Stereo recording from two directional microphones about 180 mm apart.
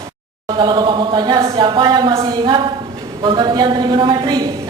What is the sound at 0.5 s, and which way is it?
Speech, 25° right (ahead or behind).